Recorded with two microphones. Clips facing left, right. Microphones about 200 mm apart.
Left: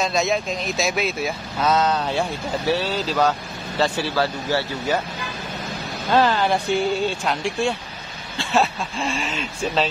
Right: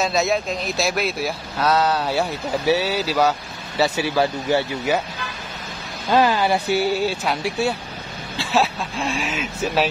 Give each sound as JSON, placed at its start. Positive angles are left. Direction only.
{"t": 0.0, "sound": "speech", "side_deg": 0}
{"t": 6.1, "sound": "speech", "side_deg": -10}